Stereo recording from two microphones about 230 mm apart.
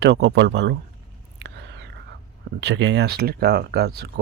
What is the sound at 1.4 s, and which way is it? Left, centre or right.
Whispering, right.